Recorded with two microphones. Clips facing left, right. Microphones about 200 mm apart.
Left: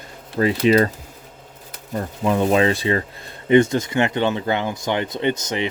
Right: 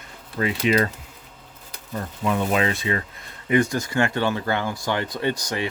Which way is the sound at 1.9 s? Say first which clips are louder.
Left 4 dB; 35° left (ahead or behind).